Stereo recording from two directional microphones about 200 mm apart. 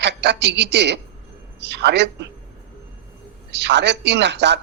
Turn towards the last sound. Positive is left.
turn(degrees=-60)  # may be behind; listen again after turning